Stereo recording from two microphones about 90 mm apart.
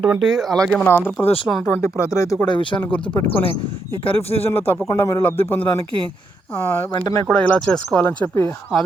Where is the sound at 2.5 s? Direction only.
65° left (ahead or behind).